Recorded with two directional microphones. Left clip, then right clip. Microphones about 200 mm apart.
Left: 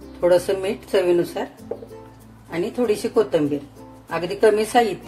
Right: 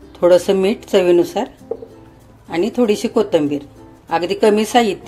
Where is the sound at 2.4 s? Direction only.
40° right (ahead or behind).